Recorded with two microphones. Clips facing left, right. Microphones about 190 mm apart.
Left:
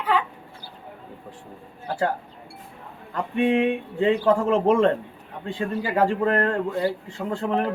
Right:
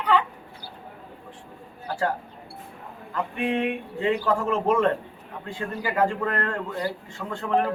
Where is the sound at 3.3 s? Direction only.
25° left (ahead or behind).